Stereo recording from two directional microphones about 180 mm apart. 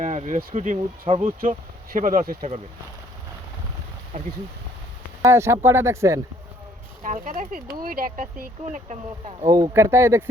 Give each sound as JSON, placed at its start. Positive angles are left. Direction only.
{"t": 0.0, "sound": "speech", "side_deg": -45}
{"t": 1.4, "sound": "speech", "side_deg": -50}
{"t": 4.1, "sound": "speech", "side_deg": -40}
{"t": 5.2, "sound": "speech", "side_deg": -15}
{"t": 7.0, "sound": "speech", "side_deg": -45}
{"t": 9.5, "sound": "speech", "side_deg": -20}